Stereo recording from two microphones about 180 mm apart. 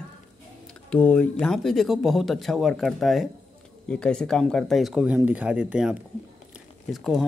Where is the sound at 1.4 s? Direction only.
Centre (ahead or behind).